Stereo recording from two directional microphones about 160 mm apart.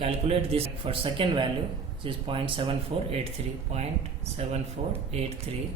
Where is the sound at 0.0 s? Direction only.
40° right (ahead or behind).